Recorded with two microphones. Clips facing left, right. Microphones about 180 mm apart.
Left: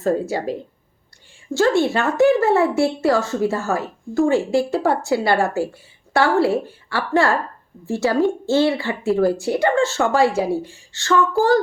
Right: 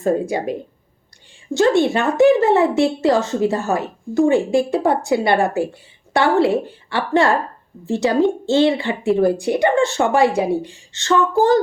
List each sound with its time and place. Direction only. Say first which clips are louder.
0.0 s speech: right 2 dB; 15° right (ahead or behind)